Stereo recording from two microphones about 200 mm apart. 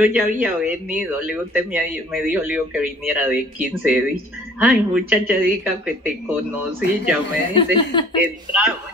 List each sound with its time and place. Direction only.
0.0 s speech: 5° right (ahead or behind)
4.6 s speech: 5° right (ahead or behind)
7.5 s speech: 25° left (ahead or behind)
8.2 s speech: 5° right (ahead or behind)